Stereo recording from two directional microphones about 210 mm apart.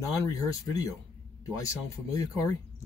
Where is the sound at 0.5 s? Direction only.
15° left (ahead or behind).